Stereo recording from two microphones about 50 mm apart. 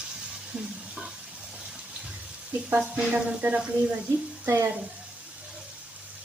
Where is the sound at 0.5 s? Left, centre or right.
Centre.